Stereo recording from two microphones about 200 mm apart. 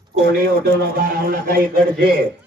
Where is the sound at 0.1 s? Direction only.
50° right (ahead or behind).